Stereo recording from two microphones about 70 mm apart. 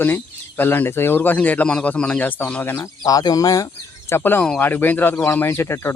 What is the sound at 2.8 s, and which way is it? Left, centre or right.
Speech, left.